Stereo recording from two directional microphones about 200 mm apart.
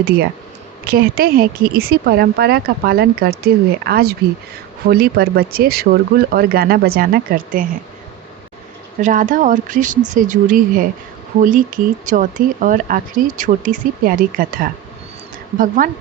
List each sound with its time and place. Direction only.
0.9 s speech: 45° right (ahead or behind)
9.0 s speech: 40° right (ahead or behind)